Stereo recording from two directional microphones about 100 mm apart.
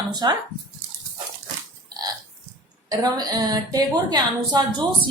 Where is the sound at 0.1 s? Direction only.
45° right (ahead or behind).